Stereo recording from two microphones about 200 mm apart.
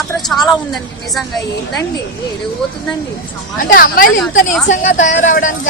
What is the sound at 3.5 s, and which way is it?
A woman's voice, 45° left (ahead or behind).